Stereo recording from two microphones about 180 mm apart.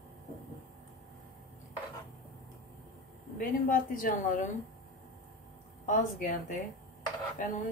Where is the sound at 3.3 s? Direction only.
50° left (ahead or behind).